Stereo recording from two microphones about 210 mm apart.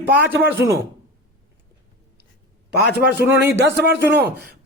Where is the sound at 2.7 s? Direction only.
50° right (ahead or behind).